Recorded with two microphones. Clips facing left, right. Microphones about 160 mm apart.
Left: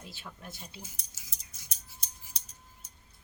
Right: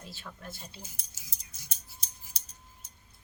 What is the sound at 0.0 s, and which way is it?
Speech, 15° left (ahead or behind).